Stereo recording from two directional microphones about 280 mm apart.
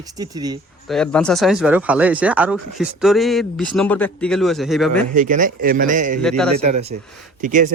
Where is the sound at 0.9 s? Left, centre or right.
Centre.